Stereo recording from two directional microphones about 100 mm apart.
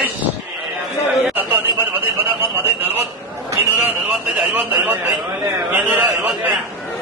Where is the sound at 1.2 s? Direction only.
15° right (ahead or behind).